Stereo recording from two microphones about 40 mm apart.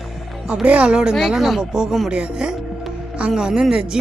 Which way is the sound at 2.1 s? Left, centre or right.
Right.